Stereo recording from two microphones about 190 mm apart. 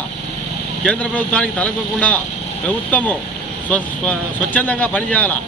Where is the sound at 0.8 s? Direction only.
5° left (ahead or behind).